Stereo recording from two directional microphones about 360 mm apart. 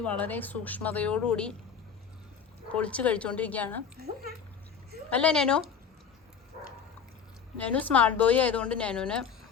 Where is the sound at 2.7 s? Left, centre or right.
Centre.